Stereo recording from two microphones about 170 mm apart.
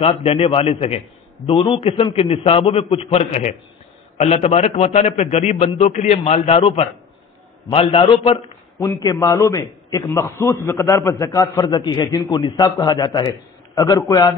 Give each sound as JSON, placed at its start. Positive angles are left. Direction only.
{"t": 0.0, "sound": "a man's voice", "side_deg": 35}
{"t": 8.7, "sound": "a man's voice", "side_deg": 20}